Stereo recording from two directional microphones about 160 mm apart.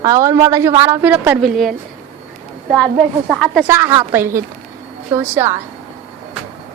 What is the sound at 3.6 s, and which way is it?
A woman's voice, 15° right (ahead or behind).